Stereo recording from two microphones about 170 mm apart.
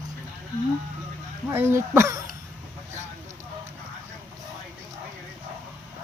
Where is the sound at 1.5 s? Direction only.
15° right (ahead or behind).